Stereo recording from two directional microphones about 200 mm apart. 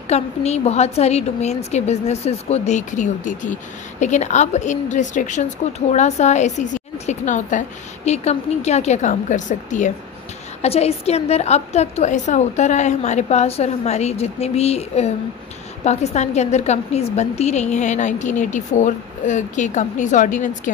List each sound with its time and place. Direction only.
0.1 s a woman's voice: 30° left (ahead or behind)